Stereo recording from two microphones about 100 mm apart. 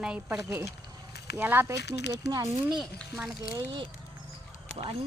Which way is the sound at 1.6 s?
35° right (ahead or behind).